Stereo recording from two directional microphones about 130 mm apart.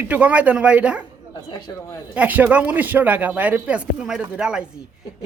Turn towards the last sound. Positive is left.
turn(degrees=-5)  # may be behind; listen again after turning